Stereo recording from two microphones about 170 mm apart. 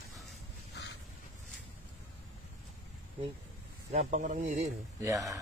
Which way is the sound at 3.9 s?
45° right (ahead or behind).